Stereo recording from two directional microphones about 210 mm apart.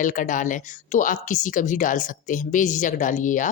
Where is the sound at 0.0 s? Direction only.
40° left (ahead or behind).